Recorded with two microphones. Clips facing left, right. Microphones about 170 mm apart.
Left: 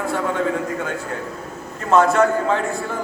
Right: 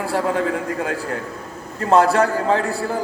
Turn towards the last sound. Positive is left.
turn(degrees=-35)  # may be behind; listen again after turning